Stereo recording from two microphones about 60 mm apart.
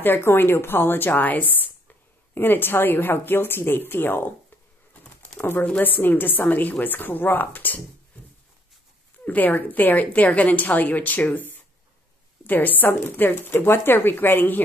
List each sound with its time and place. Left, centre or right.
0.0 s a woman's voice: left
5.4 s a woman's voice: left
9.2 s a woman's voice: left